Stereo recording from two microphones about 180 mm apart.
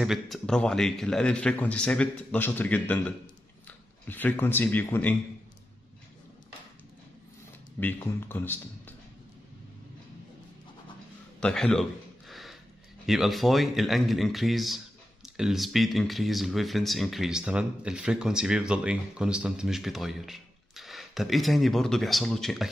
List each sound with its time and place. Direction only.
0.0 s speech: centre (ahead or behind)
7.8 s speech: 10° left (ahead or behind)
11.3 s a sound: 5° left (ahead or behind)
13.0 s speech: centre (ahead or behind)